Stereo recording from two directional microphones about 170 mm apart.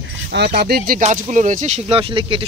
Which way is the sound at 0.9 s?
50° right (ahead or behind).